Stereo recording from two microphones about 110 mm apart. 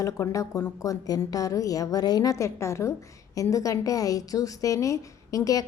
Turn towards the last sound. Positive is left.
turn(degrees=30)  # may be behind; listen again after turning